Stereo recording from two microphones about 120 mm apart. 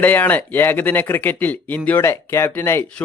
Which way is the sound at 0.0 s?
15° left (ahead or behind).